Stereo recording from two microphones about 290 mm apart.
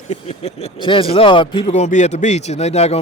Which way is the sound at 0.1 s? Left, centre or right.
Left.